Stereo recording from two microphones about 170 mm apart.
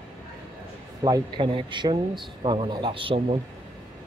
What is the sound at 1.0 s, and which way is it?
A man's voice, 25° right (ahead or behind).